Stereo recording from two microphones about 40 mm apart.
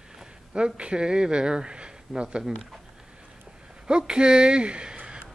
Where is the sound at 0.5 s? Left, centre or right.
Right.